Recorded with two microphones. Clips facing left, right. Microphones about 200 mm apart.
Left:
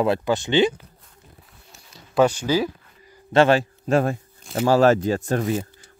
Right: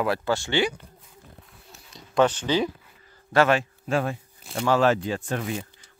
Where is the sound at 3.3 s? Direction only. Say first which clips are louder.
Left 4 dB; 30° left (ahead or behind).